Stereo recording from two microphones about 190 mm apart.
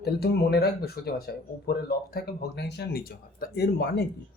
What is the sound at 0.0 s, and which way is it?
Speech, 60° left (ahead or behind).